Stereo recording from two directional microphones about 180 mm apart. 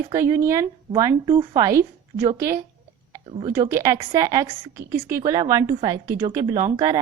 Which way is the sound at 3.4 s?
15° right (ahead or behind).